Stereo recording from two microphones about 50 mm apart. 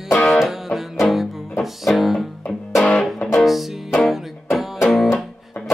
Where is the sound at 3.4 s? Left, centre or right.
Centre.